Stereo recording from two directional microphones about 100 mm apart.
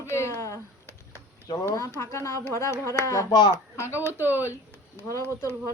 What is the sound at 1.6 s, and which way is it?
Speech, 30° left (ahead or behind).